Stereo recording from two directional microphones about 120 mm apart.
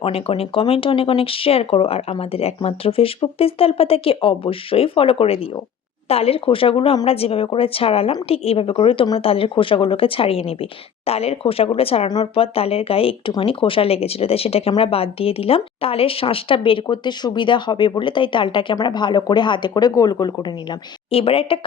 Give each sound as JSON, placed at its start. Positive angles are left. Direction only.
{"t": 0.0, "sound": "speech", "side_deg": 55}
{"t": 21.1, "sound": "speech", "side_deg": 50}